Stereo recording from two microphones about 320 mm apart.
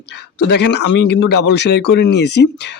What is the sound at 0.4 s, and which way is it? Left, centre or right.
A man's voice, left.